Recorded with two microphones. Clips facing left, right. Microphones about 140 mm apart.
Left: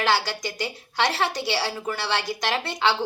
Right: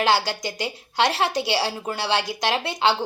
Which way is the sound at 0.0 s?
15° right (ahead or behind).